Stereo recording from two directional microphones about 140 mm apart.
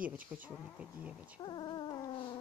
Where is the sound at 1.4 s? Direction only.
30° left (ahead or behind).